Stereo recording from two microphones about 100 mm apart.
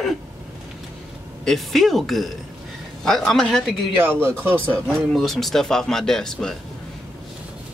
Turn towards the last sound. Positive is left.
turn(degrees=5)  # may be behind; listen again after turning